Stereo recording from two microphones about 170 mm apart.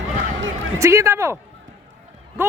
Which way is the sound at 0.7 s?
15° right (ahead or behind).